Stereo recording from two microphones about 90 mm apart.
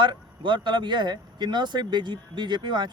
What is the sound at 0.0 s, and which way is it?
Speech, 60° right (ahead or behind).